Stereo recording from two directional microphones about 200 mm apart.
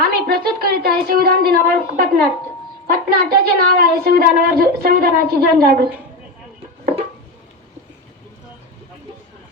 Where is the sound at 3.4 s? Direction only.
50° right (ahead or behind).